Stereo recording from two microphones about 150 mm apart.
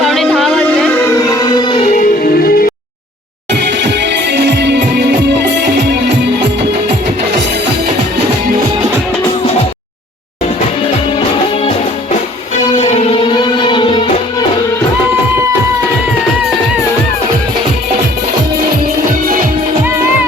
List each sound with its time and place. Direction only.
0.0 s a sound: centre (ahead or behind); by 1.9 s 35° left (ahead or behind)
1.9 s music: 65° left (ahead or behind)
12.8 s music: 45° left (ahead or behind)
13.2 s music: 30° left (ahead or behind)